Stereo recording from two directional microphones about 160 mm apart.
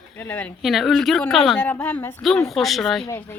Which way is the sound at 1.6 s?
10° left (ahead or behind).